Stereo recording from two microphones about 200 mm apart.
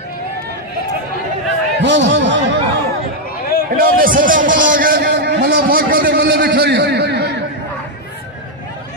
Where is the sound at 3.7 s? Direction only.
45° right (ahead or behind).